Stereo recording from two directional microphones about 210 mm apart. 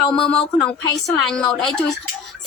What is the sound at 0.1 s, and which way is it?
A woman's voice, 5° left (ahead or behind).